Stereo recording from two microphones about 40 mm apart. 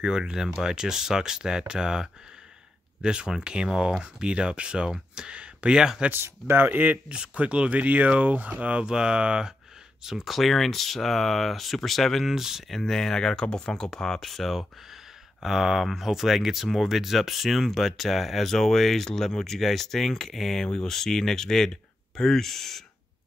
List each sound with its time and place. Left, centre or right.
0.0 s speech: centre
5.3 s speech: right
6.1 s speech: right
7.1 s speech: right
8.8 s speech: right
10.0 s speech: centre
10.3 s speech: centre
12.3 s speech: centre
12.7 s speech: centre
14.2 s speech: centre